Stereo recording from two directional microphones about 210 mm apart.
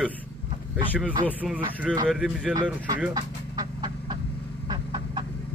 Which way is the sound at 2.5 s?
15° right (ahead or behind).